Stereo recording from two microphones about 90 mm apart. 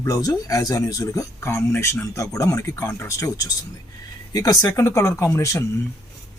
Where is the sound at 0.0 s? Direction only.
45° left (ahead or behind).